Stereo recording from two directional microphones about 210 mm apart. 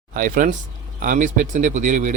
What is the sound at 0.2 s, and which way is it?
A man's voice, 40° right (ahead or behind).